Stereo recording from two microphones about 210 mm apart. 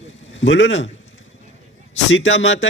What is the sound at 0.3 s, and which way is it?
Speech, 60° left (ahead or behind).